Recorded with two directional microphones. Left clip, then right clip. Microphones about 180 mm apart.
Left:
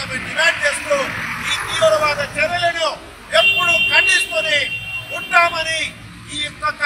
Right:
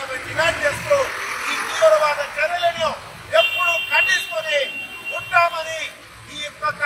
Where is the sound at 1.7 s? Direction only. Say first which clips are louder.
Even; centre (ahead or behind).